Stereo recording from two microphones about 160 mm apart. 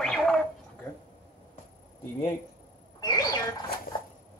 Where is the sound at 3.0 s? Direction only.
25° left (ahead or behind).